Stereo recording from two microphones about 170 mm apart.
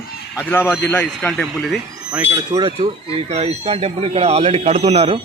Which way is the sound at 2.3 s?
25° right (ahead or behind).